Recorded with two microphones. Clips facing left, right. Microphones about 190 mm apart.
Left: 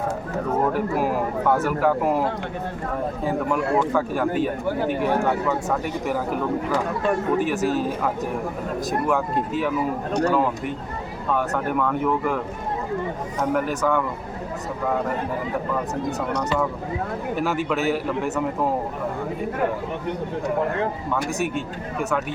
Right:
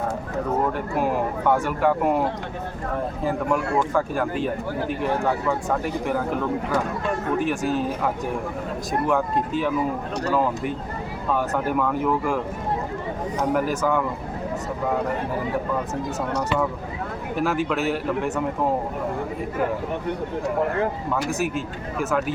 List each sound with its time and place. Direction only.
0.7 s speech: 5° left (ahead or behind)
3.2 s speech: centre (ahead or behind)
7.3 s speech: centre (ahead or behind)
13.5 s speech: centre (ahead or behind)
17.3 s speech: centre (ahead or behind)
21.1 s speech: centre (ahead or behind)